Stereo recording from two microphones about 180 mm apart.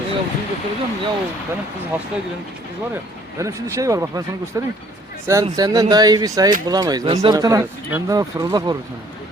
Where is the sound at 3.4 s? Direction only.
15° right (ahead or behind).